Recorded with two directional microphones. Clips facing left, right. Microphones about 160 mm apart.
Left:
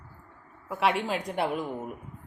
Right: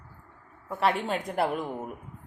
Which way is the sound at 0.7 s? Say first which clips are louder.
Even; centre (ahead or behind).